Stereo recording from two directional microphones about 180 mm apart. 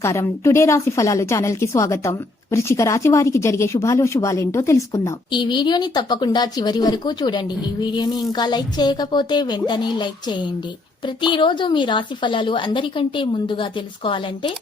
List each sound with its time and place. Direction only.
0.0 s speech: 15° left (ahead or behind)